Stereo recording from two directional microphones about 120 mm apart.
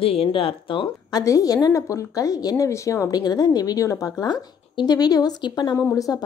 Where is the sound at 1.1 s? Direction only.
30° left (ahead or behind).